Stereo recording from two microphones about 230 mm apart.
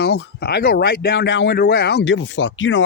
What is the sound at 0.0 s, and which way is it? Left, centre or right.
Speech, left.